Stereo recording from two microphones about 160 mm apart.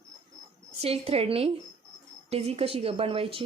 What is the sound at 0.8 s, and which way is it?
A woman's voice, 40° right (ahead or behind).